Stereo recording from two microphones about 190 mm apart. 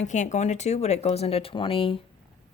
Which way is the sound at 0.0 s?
40° left (ahead or behind).